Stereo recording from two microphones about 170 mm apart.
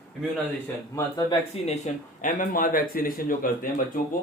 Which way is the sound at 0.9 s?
20° left (ahead or behind).